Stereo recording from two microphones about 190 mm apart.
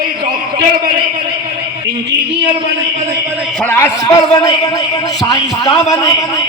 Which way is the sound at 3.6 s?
10° left (ahead or behind).